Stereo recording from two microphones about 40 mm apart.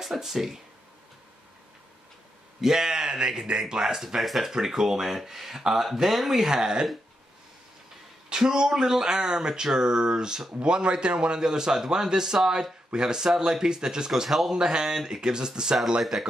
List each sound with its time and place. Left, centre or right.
0.0 s a man's voice: centre
2.6 s a man's voice: centre
4.2 s a man's voice: centre
8.3 s a man's voice: centre
16.0 s speech: centre